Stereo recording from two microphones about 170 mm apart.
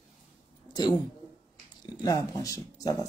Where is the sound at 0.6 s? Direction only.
25° left (ahead or behind).